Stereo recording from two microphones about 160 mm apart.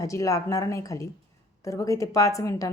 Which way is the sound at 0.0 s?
20° left (ahead or behind).